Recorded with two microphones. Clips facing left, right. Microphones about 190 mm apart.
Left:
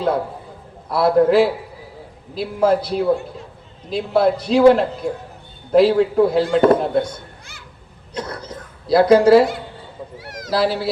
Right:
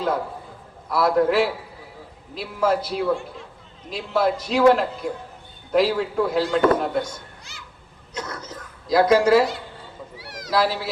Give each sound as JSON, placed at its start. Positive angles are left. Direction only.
{"t": 0.9, "sound": "speech", "side_deg": 30}
{"t": 8.1, "sound": "a sound", "side_deg": 30}
{"t": 10.2, "sound": "cat", "side_deg": 50}
{"t": 10.5, "sound": "speech", "side_deg": 35}